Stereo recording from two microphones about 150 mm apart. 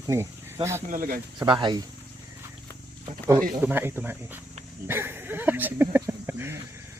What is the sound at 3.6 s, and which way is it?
Speech, 15° right (ahead or behind).